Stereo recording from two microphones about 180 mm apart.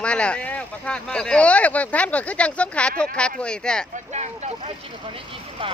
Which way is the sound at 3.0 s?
5° left (ahead or behind).